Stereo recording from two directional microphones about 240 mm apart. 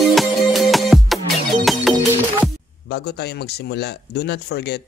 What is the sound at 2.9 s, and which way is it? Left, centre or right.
Speech, left.